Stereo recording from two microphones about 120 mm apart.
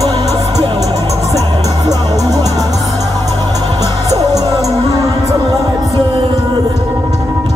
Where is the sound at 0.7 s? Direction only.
30° right (ahead or behind).